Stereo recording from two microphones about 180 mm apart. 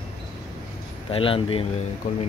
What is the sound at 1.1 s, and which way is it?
Speech, 30° left (ahead or behind).